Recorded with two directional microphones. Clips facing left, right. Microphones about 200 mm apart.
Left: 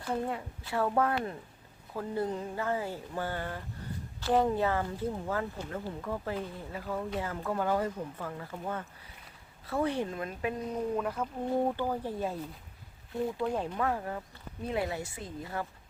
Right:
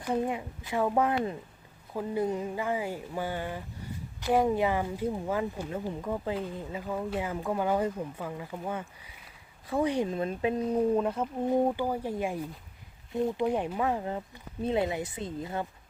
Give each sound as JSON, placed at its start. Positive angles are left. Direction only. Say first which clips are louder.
{"t": 0.0, "sound": "speech", "louder": "right 4 dB", "side_deg": -15}
{"t": 10.2, "sound": "speech", "louder": "right 6 dB", "side_deg": -25}